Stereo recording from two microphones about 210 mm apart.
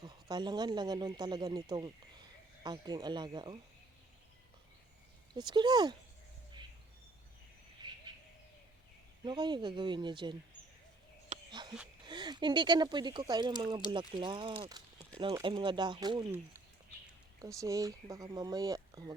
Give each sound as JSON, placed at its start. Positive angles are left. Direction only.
{"t": 0.0, "sound": "speech", "side_deg": -20}
{"t": 5.3, "sound": "speech", "side_deg": -20}
{"t": 7.8, "sound": "bird", "side_deg": -20}
{"t": 9.2, "sound": "speech", "side_deg": -20}
{"t": 11.3, "sound": "a sound", "side_deg": -35}
{"t": 12.0, "sound": "speech", "side_deg": -20}
{"t": 17.4, "sound": "speech", "side_deg": -15}